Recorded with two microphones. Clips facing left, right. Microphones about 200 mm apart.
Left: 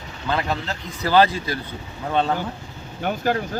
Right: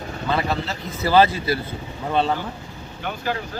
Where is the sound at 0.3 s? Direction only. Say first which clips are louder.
Right 1 dB; 5° right (ahead or behind).